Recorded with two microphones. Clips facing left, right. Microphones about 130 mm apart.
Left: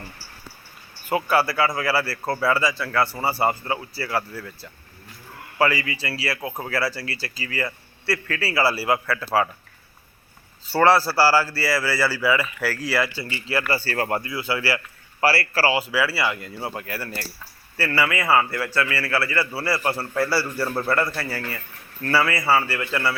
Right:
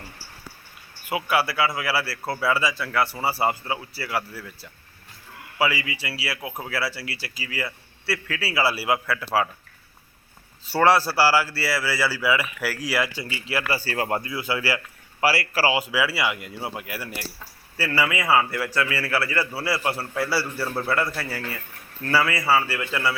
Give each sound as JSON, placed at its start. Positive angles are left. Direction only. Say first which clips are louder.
{"t": 1.0, "sound": "speech", "louder": "left 3 dB", "side_deg": -5}
{"t": 10.7, "sound": "a man's voice", "louder": "left 1 dB", "side_deg": -10}